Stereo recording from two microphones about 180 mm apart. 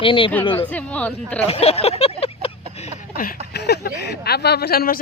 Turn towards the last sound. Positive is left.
turn(degrees=55)  # may be behind; listen again after turning